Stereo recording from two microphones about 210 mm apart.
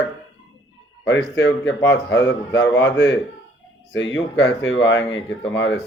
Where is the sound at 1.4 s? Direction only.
60° left (ahead or behind).